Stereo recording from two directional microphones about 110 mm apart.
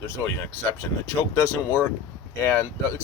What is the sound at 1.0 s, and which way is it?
Speech, 25° left (ahead or behind).